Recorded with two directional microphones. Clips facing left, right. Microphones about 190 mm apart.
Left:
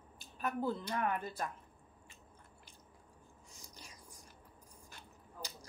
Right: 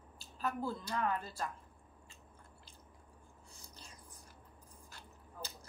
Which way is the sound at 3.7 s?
15° left (ahead or behind).